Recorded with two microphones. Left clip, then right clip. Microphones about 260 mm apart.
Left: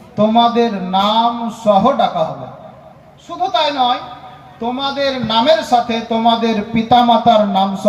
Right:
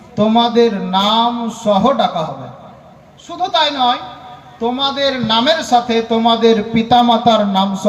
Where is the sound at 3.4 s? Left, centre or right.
Right.